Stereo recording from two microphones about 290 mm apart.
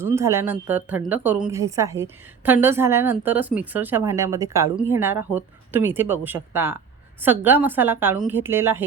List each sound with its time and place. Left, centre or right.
0.0 s a woman's voice: centre